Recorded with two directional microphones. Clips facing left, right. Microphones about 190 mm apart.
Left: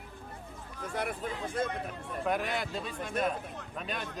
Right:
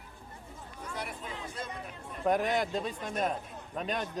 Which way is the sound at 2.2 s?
20° right (ahead or behind).